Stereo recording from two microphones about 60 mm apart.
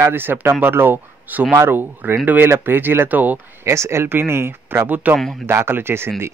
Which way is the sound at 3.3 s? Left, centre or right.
Right.